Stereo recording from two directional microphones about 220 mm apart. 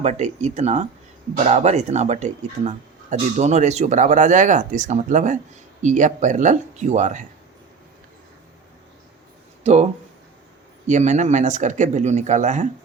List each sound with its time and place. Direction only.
0.0 s speech: 30° right (ahead or behind)
10.8 s speech: 35° right (ahead or behind)